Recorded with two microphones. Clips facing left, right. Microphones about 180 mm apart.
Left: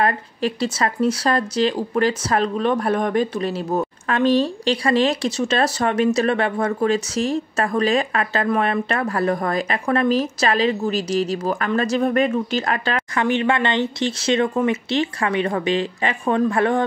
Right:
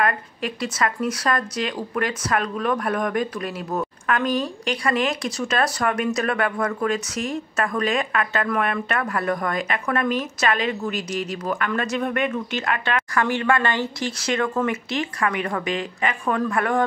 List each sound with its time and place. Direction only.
0.0 s speech: 30° left (ahead or behind)
13.1 s speech: 20° left (ahead or behind)